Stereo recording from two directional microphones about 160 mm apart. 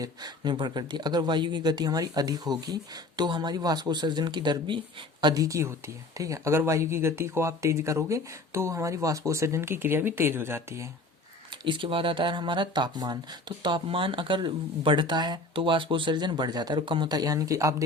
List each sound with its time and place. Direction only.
0.0 s speech: 25° right (ahead or behind)
11.5 s speech: 30° right (ahead or behind)